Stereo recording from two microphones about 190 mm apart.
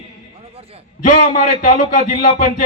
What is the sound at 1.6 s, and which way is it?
Speech, 40° left (ahead or behind).